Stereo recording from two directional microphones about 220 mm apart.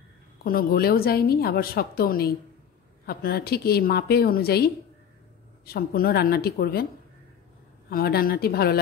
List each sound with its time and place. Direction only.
0.4 s a woman's voice: 40° left (ahead or behind)
5.7 s a woman's voice: 45° left (ahead or behind)
7.9 s a woman's voice: 45° left (ahead or behind)